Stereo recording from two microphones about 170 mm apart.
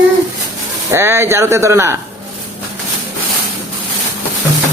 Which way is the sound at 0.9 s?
15° right (ahead or behind).